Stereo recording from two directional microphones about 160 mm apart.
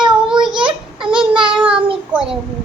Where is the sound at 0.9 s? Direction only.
30° right (ahead or behind).